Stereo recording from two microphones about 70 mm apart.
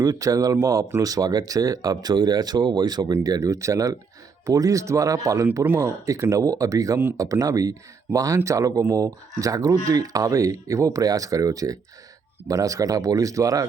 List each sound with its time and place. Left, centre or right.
0.0 s speech: right
3.1 s speech: right
5.7 s speech: right